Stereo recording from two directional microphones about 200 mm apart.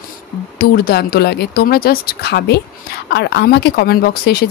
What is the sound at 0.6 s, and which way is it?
Speech, 50° left (ahead or behind).